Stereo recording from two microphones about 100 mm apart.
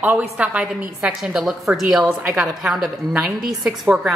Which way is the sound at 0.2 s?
10° right (ahead or behind).